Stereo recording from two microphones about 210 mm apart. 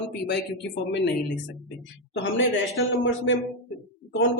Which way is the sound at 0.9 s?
55° left (ahead or behind).